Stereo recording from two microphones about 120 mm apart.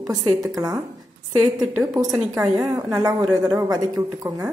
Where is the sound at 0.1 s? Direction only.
30° right (ahead or behind).